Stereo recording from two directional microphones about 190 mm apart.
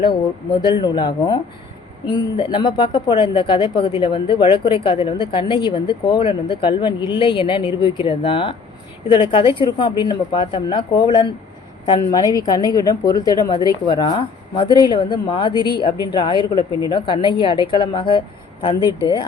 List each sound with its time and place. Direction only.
0.6 s speech: 25° left (ahead or behind)